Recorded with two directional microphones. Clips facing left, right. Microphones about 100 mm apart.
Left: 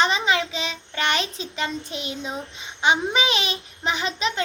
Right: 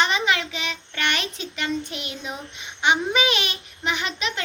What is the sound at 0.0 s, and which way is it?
Child singing, 30° left (ahead or behind).